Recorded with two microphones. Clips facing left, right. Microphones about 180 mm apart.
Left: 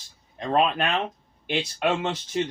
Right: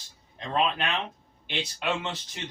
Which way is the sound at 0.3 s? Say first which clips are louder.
Left 5 dB; 50° left (ahead or behind).